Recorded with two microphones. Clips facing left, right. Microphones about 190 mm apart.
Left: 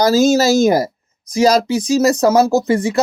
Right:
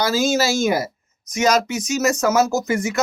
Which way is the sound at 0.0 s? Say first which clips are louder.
Left 7 dB; 40° left (ahead or behind).